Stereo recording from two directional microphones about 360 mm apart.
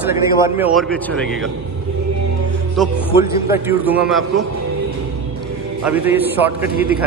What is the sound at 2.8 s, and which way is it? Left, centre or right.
A man's voice, centre.